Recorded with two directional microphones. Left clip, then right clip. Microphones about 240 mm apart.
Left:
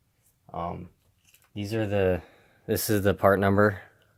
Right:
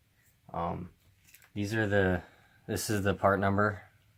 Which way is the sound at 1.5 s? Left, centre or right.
Left.